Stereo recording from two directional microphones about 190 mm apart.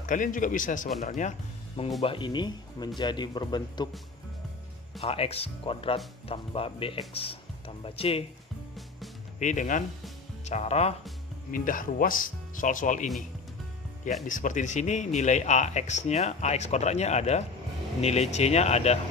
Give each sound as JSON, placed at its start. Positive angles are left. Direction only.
{"t": 0.0, "sound": "speech", "side_deg": 45}
{"t": 2.0, "sound": "speech", "side_deg": 25}
{"t": 5.0, "sound": "speech", "side_deg": 30}
{"t": 9.4, "sound": "speech", "side_deg": 40}
{"t": 11.5, "sound": "speech", "side_deg": 45}
{"t": 14.2, "sound": "speech", "side_deg": 45}